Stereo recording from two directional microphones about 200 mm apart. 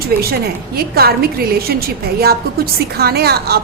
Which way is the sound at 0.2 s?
50° right (ahead or behind).